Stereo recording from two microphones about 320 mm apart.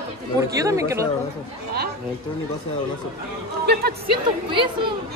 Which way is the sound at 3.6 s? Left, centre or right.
Right.